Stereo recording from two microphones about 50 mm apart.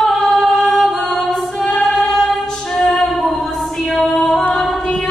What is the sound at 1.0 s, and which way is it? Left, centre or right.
A capella, centre.